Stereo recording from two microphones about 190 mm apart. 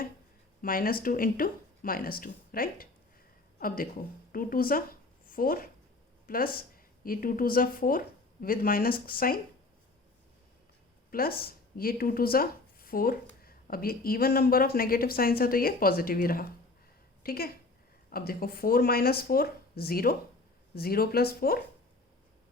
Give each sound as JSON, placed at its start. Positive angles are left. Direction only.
{"t": 0.6, "sound": "a woman's voice", "side_deg": 50}
{"t": 11.1, "sound": "speech", "side_deg": 50}